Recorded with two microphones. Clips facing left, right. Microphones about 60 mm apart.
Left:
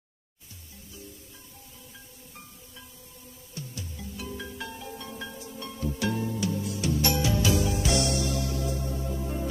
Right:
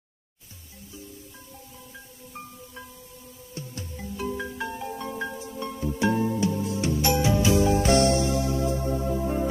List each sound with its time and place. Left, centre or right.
3.5 s music: right
4.4 s marimba: right
5.9 s music: right